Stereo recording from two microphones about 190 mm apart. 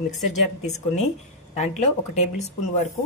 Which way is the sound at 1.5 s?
35° left (ahead or behind).